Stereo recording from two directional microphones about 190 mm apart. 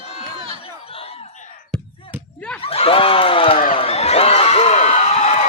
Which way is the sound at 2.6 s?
30° left (ahead or behind).